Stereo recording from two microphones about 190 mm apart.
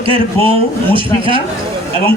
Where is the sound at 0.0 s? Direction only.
30° right (ahead or behind).